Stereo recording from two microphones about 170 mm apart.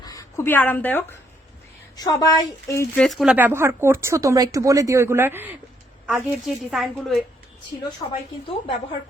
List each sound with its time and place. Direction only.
0.0 s a woman's voice: 20° left (ahead or behind)
3.0 s a woman's voice: centre (ahead or behind)
3.3 s a woman's voice: 15° right (ahead or behind); by 7.2 s 5° left (ahead or behind)
8.0 s speech: 30° left (ahead or behind)